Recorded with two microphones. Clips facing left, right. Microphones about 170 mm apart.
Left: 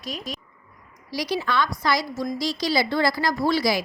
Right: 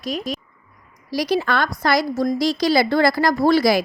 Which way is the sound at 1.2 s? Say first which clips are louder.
Right 4 dB; 50° right (ahead or behind).